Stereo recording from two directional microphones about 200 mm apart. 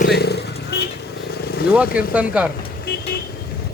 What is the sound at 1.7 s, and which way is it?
Speech, 5° right (ahead or behind).